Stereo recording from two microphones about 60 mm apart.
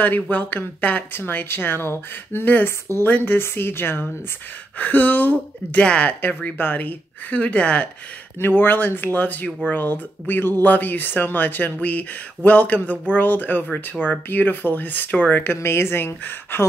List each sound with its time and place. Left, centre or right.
0.0 s speech: left
6.6 s speech: left
8.4 s speech: left
15.5 s a woman's voice: left